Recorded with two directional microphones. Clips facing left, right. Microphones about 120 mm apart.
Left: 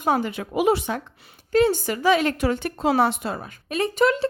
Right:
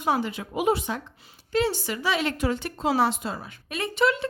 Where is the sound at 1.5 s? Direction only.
50° left (ahead or behind).